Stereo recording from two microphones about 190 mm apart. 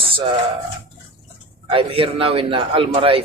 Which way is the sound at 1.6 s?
30° right (ahead or behind).